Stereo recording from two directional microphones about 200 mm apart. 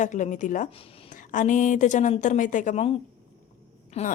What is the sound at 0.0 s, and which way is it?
A woman's voice, 40° left (ahead or behind).